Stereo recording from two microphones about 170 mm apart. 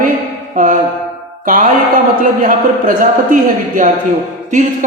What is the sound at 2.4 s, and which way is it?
Speech, 50° right (ahead or behind).